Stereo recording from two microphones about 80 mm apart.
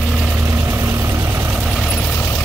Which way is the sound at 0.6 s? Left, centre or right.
Right.